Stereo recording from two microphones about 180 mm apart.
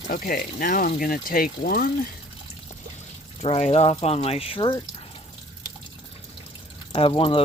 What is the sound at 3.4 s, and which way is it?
Speech, 35° left (ahead or behind).